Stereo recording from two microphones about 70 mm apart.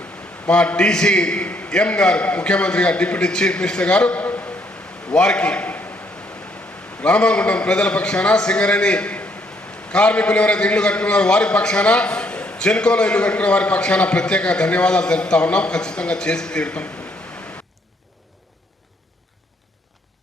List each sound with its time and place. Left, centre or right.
0.4 s a man's voice: centre
5.1 s a man's voice: centre
7.0 s a man's voice: centre